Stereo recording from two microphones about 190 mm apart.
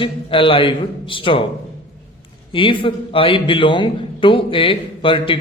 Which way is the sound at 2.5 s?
25° left (ahead or behind).